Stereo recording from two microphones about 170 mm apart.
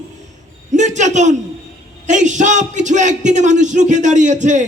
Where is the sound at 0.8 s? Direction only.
45° right (ahead or behind).